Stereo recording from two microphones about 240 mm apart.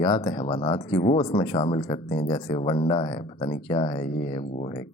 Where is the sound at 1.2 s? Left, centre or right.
Centre.